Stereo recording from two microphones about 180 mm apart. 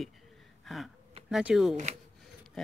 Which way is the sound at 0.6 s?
Centre (ahead or behind).